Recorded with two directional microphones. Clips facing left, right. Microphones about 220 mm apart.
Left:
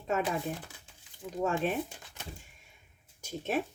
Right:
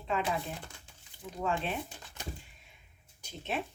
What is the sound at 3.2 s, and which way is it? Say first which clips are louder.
Speech: left 5 dB; 45° left (ahead or behind).